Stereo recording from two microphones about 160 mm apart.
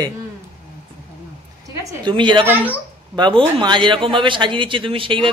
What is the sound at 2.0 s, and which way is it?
A man's voice, 30° right (ahead or behind).